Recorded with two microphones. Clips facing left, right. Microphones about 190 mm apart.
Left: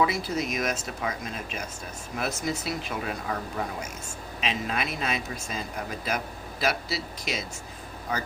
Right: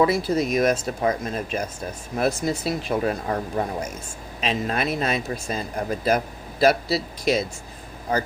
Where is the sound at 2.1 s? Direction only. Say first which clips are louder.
Right 7 dB; 35° right (ahead or behind).